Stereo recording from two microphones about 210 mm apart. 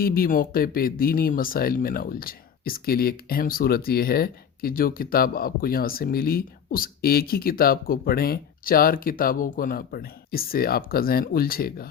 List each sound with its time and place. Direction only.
0.0 s speech: 45° left (ahead or behind)